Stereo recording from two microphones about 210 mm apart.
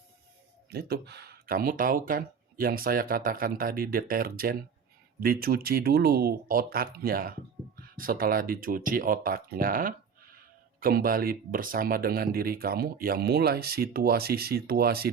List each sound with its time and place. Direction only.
0.7 s speech: 50° right (ahead or behind)